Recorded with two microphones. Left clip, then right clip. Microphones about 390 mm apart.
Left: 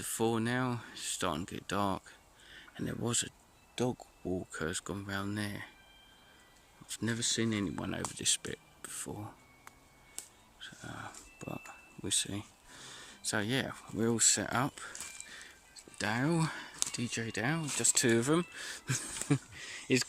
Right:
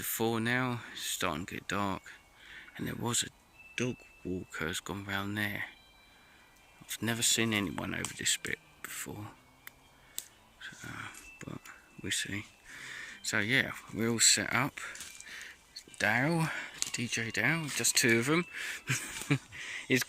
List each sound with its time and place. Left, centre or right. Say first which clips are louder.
0.0 s speech: even; centre
3.8 s chime: left 1 dB; centre
4.5 s speech: right 1 dB; centre
6.8 s speech: right 3 dB; centre
10.2 s dog: right 3 dB; centre